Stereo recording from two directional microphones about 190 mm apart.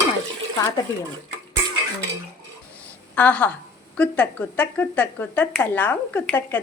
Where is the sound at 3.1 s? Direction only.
5° left (ahead or behind).